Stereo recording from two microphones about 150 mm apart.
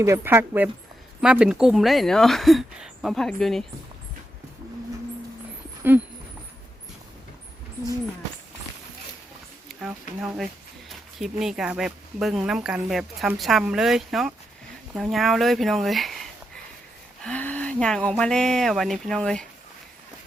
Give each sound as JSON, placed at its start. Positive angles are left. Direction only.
{"t": 0.0, "sound": "speech", "side_deg": -15}
{"t": 5.8, "sound": "speech", "side_deg": -15}
{"t": 9.6, "sound": "speech", "side_deg": -5}
{"t": 17.2, "sound": "speech", "side_deg": 10}